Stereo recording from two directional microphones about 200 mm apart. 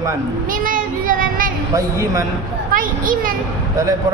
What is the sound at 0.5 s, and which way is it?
Child singing, 45° right (ahead or behind).